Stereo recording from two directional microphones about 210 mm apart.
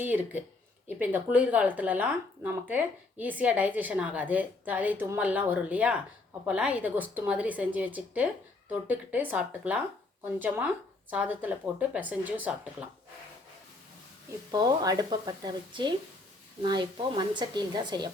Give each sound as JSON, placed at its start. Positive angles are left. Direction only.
{"t": 0.0, "sound": "speech", "side_deg": -10}
{"t": 14.5, "sound": "speech", "side_deg": -20}